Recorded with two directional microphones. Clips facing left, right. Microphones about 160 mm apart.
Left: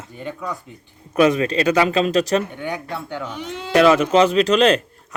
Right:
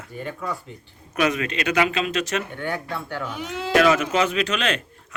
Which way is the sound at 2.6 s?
15° left (ahead or behind).